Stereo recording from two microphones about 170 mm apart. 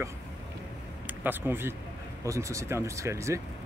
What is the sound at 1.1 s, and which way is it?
Speech, 10° right (ahead or behind).